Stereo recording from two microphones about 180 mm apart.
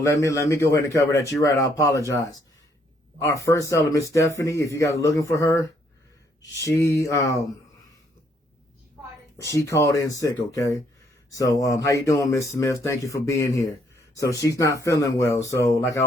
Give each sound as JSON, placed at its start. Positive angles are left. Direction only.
{"t": 0.0, "sound": "speech", "side_deg": 15}
{"t": 9.4, "sound": "speech", "side_deg": 15}